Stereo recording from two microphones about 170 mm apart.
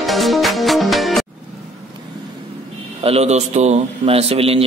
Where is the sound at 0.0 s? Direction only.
Centre (ahead or behind).